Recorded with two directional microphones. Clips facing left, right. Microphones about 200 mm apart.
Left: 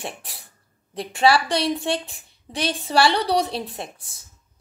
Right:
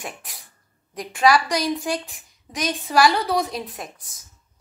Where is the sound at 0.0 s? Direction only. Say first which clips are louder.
Left 2 dB; 30° left (ahead or behind).